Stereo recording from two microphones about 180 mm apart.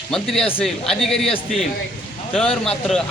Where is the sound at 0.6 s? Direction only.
Centre (ahead or behind).